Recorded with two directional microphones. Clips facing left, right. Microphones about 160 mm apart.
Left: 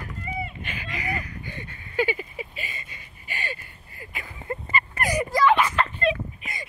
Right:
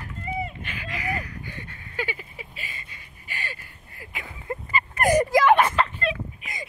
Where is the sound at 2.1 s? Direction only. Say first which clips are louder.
Left 6 dB; 5° left (ahead or behind).